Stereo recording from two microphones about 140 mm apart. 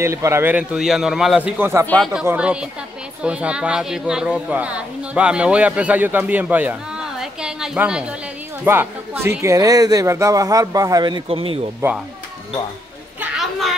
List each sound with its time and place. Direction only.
0.0 s a man's voice: 20° right (ahead or behind); by 1.5 s 5° right (ahead or behind)
1.6 s a man's voice: 15° right (ahead or behind)
1.9 s speech: centre (ahead or behind)
2.2 s a man's voice: 10° right (ahead or behind); by 11.2 s 30° right (ahead or behind)
11.2 s speech: 40° right (ahead or behind)
11.8 s a man's voice: 15° right (ahead or behind)
13.2 s a sound: centre (ahead or behind)